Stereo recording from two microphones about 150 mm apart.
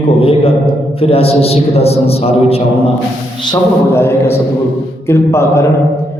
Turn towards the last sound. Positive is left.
turn(degrees=20)  # may be behind; listen again after turning